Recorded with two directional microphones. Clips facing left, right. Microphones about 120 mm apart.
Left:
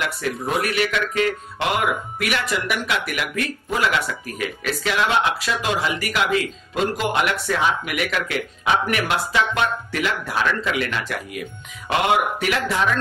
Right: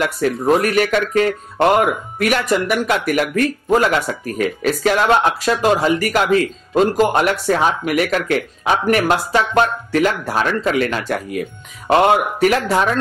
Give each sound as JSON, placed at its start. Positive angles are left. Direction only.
{"t": 0.0, "sound": "speech", "side_deg": -45}